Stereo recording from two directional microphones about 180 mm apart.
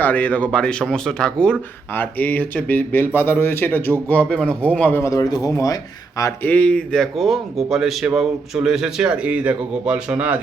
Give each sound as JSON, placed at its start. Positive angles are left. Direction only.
{"t": 0.0, "sound": "a man's voice", "side_deg": 10}